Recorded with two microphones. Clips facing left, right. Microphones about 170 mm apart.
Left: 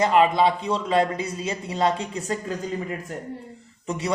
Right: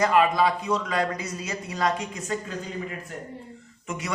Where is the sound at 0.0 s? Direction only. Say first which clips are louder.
Left 2 dB; 25° left (ahead or behind).